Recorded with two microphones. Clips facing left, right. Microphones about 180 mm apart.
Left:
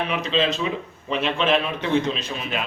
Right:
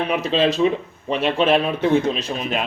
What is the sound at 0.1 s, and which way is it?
A man's voice, 45° right (ahead or behind).